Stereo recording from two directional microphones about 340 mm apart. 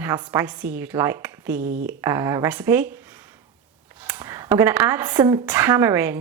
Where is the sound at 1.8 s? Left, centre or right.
Centre.